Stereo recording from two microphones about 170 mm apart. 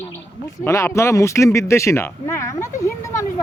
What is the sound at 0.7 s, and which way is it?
Speech, 15° left (ahead or behind).